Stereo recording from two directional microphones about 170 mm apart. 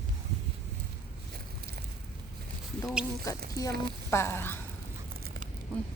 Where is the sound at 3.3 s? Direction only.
20° left (ahead or behind).